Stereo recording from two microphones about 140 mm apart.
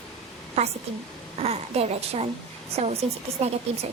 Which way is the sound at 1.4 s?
45° right (ahead or behind).